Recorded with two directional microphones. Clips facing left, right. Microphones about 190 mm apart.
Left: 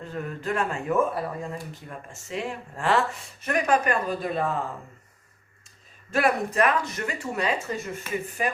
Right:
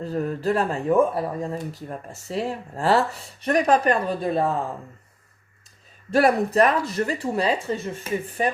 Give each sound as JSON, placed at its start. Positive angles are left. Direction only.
{"t": 0.0, "sound": "speech", "side_deg": -35}
{"t": 6.1, "sound": "speech", "side_deg": -35}